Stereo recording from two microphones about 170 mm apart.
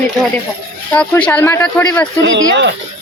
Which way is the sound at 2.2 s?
90° right.